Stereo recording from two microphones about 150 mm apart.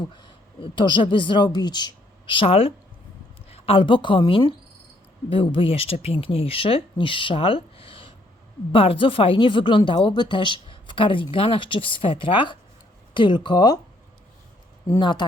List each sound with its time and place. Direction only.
0.2 s a woman's voice: 30° left (ahead or behind)
14.9 s speech: 30° left (ahead or behind)